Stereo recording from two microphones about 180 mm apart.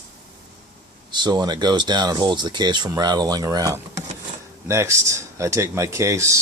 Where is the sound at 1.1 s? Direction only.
25° right (ahead or behind).